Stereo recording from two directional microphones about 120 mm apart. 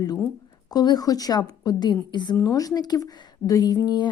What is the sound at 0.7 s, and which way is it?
Speech, 35° left (ahead or behind).